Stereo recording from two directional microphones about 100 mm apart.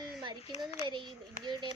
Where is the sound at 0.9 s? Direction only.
50° right (ahead or behind).